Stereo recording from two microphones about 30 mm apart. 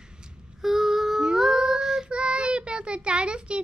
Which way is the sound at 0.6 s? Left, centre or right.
Centre.